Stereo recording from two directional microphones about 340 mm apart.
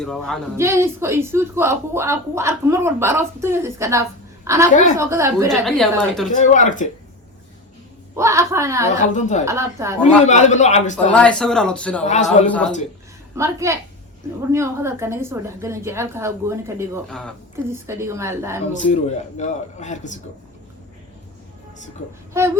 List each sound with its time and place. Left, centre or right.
0.0 s a woman's voice: centre
4.7 s a man's voice: left
4.9 s a woman's voice: centre
6.3 s a man's voice: left
8.1 s speech: centre
9.0 s a man's voice: left
9.5 s speech: centre
10.2 s a man's voice: left
10.9 s a woman's voice: centre
12.0 s a man's voice: left
13.3 s speech: centre
17.8 s speech: centre
18.9 s a man's voice: centre
22.3 s speech: centre